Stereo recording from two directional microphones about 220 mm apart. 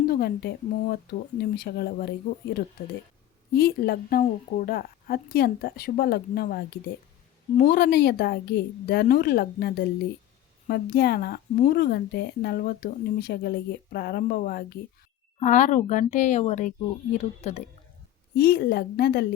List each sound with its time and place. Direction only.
0.1 s speech: 45° left (ahead or behind)
15.4 s speech: 35° left (ahead or behind)
18.3 s speech: 45° left (ahead or behind)